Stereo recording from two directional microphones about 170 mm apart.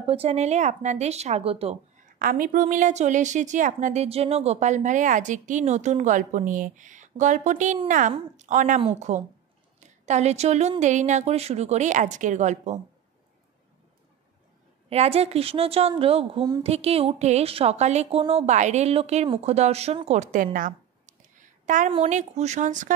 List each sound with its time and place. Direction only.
0.0 s a woman's voice: 35° right (ahead or behind)
2.1 s a woman's voice: 55° right (ahead or behind)
14.9 s a woman's voice: 35° right (ahead or behind)
20.5 s a sound: 50° right (ahead or behind)
22.1 s a woman's voice: 40° right (ahead or behind)